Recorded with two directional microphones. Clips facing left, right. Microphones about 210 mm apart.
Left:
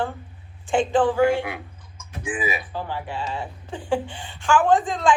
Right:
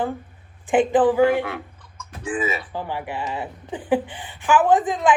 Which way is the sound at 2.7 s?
15° right (ahead or behind).